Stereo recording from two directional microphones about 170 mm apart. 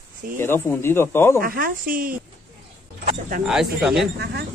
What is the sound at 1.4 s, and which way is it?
Speech, 55° right (ahead or behind).